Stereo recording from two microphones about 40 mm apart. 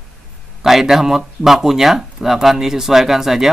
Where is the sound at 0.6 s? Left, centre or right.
Centre.